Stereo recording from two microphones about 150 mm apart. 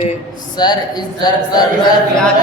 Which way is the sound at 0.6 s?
30° left (ahead or behind).